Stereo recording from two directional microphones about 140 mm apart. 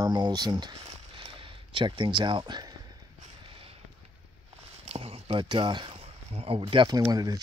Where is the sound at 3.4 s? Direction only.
40° right (ahead or behind).